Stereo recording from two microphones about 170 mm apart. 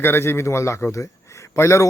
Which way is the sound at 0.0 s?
15° left (ahead or behind).